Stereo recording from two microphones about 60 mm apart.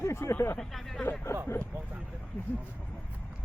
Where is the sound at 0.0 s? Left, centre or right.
Left.